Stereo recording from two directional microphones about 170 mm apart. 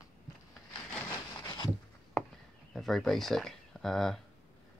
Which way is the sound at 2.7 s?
Centre (ahead or behind).